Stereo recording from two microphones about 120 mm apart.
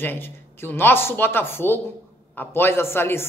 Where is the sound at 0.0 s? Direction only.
20° left (ahead or behind).